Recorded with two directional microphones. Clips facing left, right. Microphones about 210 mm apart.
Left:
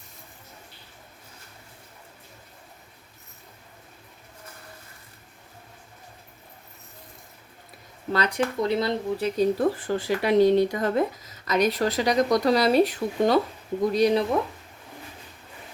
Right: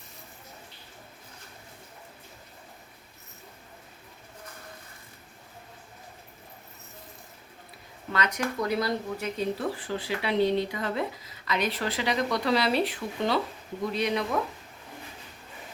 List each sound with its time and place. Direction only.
8.1 s speech: 30° left (ahead or behind)